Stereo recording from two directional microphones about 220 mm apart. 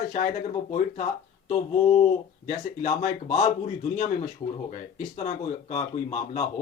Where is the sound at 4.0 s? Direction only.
35° left (ahead or behind).